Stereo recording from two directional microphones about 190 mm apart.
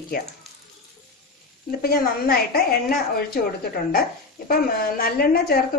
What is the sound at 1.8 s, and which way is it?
Speech, 50° left (ahead or behind).